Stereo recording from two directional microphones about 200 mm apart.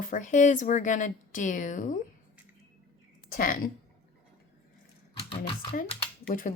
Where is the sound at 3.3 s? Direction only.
45° left (ahead or behind).